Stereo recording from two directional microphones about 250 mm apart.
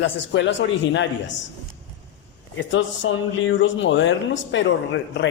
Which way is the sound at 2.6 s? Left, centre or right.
Left.